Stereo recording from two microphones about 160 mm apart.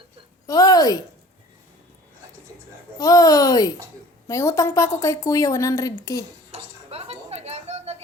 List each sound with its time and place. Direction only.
0.4 s a woman's voice: 25° left (ahead or behind)
3.0 s a woman's voice: 25° left (ahead or behind)
6.5 s a sound: 40° right (ahead or behind)